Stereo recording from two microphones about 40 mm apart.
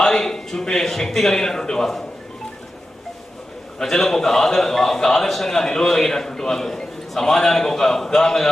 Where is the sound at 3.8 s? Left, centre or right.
Centre.